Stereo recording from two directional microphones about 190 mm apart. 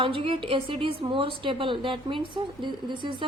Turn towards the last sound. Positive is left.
turn(degrees=-25)  # may be behind; listen again after turning